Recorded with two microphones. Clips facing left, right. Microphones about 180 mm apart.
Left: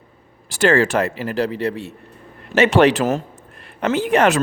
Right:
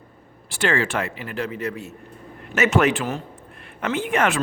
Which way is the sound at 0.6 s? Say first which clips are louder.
Left 7 dB; 40° left (ahead or behind).